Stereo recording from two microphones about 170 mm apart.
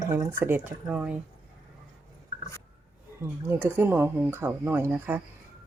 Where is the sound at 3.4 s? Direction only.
10° right (ahead or behind).